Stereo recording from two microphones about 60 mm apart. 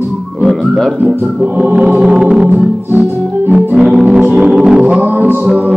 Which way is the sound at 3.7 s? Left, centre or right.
Centre.